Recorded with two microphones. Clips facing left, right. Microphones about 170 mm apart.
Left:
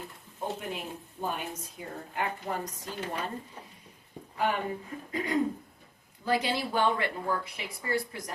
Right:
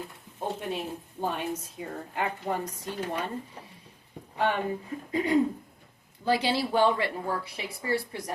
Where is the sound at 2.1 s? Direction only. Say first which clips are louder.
Right 3 dB; 25° right (ahead or behind).